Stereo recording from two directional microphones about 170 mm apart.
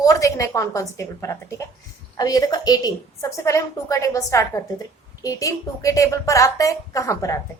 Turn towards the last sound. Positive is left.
turn(degrees=20)  # may be behind; listen again after turning